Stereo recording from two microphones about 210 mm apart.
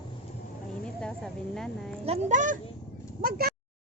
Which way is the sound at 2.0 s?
35° right (ahead or behind).